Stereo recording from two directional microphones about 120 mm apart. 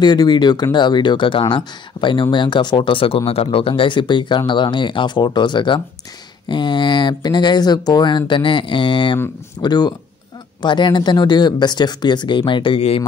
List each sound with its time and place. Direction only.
0.0 s speech: 35° left (ahead or behind); by 13.0 s 50° left (ahead or behind)